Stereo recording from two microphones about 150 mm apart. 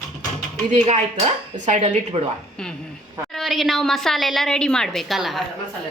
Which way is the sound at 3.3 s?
Centre (ahead or behind).